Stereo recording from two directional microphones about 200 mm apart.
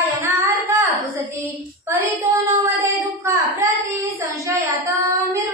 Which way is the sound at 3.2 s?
15° right (ahead or behind).